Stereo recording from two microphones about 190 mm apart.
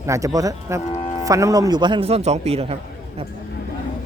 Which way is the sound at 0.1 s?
15° right (ahead or behind).